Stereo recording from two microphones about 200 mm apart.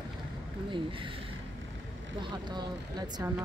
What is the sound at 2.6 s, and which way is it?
Speech, 20° right (ahead or behind).